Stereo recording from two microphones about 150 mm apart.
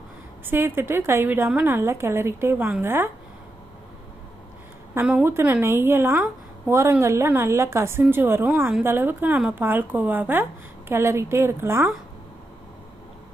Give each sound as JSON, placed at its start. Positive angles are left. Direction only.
{"t": 0.4, "sound": "a woman's voice", "side_deg": -15}
{"t": 4.9, "sound": "a woman's voice", "side_deg": -10}